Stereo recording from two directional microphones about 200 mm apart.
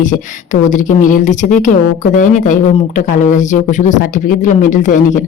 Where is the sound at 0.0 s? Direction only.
40° left (ahead or behind).